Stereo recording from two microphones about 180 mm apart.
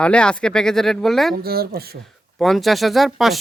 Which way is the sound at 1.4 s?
60° right (ahead or behind).